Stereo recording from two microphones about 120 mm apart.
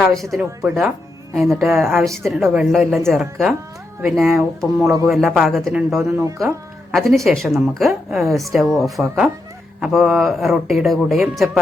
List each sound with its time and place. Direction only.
0.1 s a man's voice: centre (ahead or behind)
4.9 s speech: 25° right (ahead or behind)
5.1 s a man's voice: centre (ahead or behind)